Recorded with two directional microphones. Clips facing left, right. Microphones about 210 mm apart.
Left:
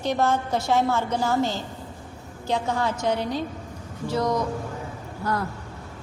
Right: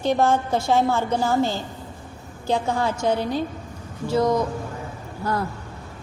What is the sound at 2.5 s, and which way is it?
A woman's voice, 30° right (ahead or behind).